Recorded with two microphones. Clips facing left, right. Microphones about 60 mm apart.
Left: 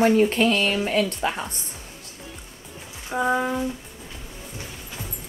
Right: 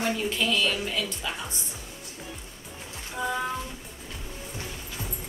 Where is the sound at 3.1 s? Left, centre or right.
Left.